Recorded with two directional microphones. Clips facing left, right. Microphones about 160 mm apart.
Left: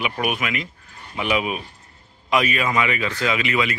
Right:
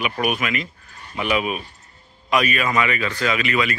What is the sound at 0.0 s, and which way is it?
Speech, 15° left (ahead or behind).